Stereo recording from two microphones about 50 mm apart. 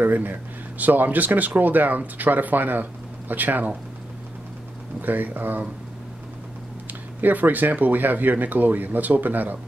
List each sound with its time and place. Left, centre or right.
0.0 s speech: right
5.0 s speech: right
6.9 s speech: right